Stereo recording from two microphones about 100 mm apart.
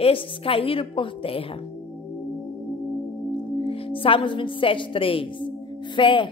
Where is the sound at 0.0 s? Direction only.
65° left (ahead or behind).